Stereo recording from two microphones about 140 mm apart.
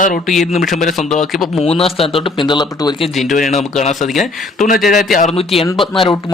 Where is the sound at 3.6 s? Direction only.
55° left (ahead or behind).